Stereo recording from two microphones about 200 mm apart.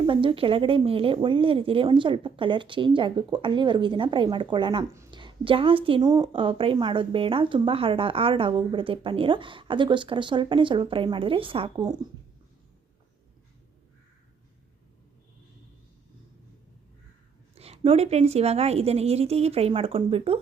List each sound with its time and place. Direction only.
0.0 s a woman's voice: 25° right (ahead or behind)
17.5 s a woman's voice: 30° right (ahead or behind)